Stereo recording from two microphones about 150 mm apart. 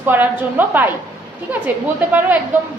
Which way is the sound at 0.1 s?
10° right (ahead or behind).